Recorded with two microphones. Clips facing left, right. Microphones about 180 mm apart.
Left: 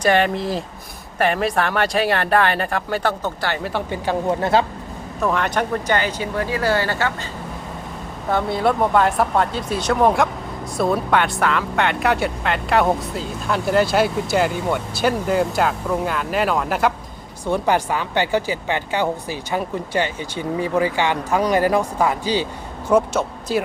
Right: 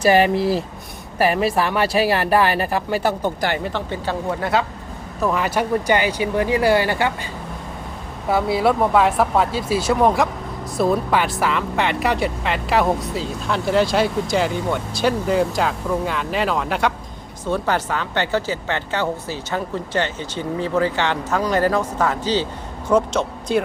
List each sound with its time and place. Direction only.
0.0 s speech: 5° right (ahead or behind)
3.6 s speech: 10° left (ahead or behind)
4.4 s speech: 25° left (ahead or behind)
5.2 s speech: 5° right (ahead or behind)
8.3 s speech: 5° right (ahead or behind)
17.4 s speech: 15° left (ahead or behind)